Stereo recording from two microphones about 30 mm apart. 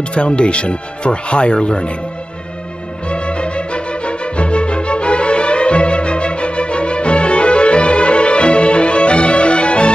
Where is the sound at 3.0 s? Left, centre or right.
Left.